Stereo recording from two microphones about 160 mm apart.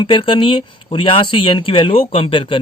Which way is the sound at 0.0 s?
30° left (ahead or behind).